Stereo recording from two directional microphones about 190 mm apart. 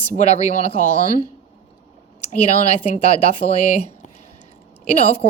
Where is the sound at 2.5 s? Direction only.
35° left (ahead or behind).